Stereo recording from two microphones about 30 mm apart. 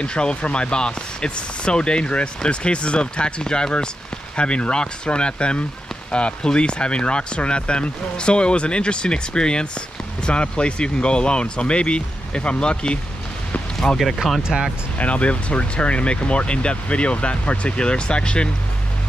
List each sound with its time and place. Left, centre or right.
0.0 s speech: left
13.8 s speech: centre
14.2 s speech: centre
15.0 s speech: left